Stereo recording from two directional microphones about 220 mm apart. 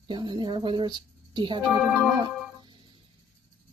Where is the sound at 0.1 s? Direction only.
20° right (ahead or behind).